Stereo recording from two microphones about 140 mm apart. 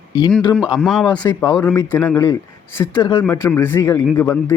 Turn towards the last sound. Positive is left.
turn(degrees=15)  # may be behind; listen again after turning